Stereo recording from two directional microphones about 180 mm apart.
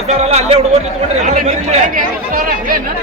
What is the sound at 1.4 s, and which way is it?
Speech, 50° right (ahead or behind).